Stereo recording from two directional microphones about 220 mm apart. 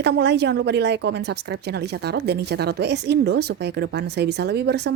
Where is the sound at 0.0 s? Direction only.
50° right (ahead or behind).